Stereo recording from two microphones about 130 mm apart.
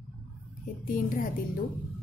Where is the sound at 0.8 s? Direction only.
90° left.